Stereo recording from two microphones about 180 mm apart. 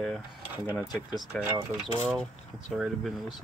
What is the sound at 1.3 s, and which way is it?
Speech, 5° left (ahead or behind).